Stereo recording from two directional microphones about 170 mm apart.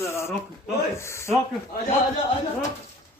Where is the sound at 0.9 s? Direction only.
15° left (ahead or behind).